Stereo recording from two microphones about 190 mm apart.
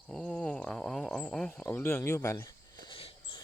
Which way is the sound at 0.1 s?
5° left (ahead or behind).